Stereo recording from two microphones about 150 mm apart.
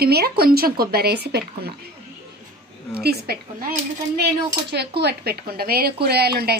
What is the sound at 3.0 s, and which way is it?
Speech, 90° right.